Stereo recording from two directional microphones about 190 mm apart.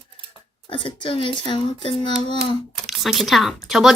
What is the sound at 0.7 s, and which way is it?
Speech, 25° left (ahead or behind).